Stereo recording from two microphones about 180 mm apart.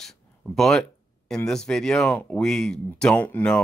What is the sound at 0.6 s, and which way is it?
Speech, centre (ahead or behind).